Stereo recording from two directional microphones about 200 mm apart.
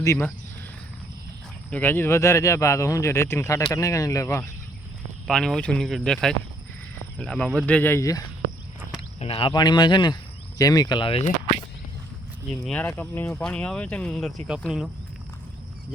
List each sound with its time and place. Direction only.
0.0 s speech: 15° left (ahead or behind)
1.7 s speech: 10° left (ahead or behind)
5.3 s speech: 5° left (ahead or behind)
9.2 s speech: 30° left (ahead or behind)
12.6 s speech: 5° left (ahead or behind)